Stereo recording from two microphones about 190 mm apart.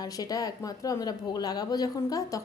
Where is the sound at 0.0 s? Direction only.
20° left (ahead or behind).